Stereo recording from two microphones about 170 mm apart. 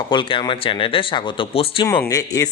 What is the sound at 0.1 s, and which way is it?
Speech, 30° left (ahead or behind).